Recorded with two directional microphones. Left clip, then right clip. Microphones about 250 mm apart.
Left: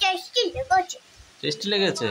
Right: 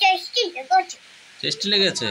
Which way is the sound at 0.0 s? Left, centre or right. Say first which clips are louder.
Right 4 dB; centre.